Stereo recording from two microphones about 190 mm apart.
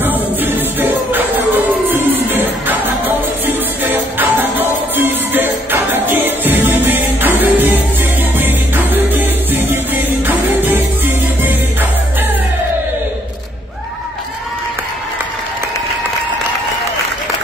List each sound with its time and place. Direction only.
0.0 s music: 10° right (ahead or behind)